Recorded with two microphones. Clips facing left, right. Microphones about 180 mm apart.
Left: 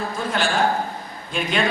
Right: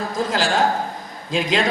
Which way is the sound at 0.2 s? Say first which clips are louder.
Right 2 dB; 90° right.